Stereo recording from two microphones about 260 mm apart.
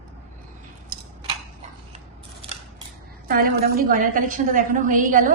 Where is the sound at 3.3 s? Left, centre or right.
Right.